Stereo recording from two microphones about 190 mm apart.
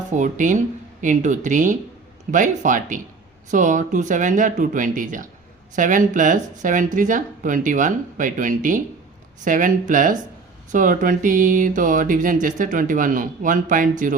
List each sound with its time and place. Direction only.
0.1 s speech: 40° right (ahead or behind)